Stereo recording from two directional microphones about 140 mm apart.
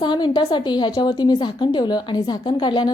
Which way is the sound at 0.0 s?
35° left (ahead or behind).